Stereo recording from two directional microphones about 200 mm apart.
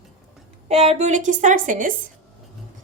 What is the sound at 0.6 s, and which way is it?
A woman's voice, 35° right (ahead or behind).